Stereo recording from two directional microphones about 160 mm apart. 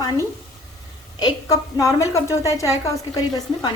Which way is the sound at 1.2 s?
20° left (ahead or behind).